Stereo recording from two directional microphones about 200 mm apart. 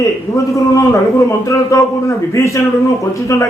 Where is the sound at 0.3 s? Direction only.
15° left (ahead or behind).